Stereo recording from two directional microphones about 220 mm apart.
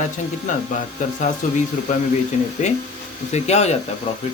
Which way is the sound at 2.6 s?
30° left (ahead or behind).